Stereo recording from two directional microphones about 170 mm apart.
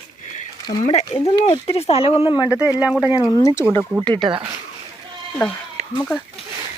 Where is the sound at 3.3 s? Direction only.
20° left (ahead or behind).